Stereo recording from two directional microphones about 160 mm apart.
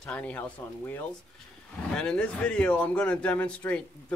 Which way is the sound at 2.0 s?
5° left (ahead or behind).